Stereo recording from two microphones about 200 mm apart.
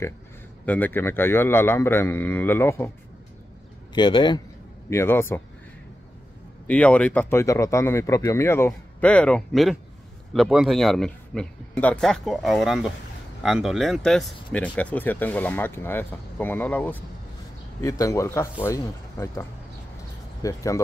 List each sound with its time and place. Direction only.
0.7 s speech: 10° left (ahead or behind)
3.9 s speech: 20° left (ahead or behind)
4.8 s speech: 10° left (ahead or behind)
6.7 s speech: 5° left (ahead or behind)
20.4 s speech: 15° left (ahead or behind)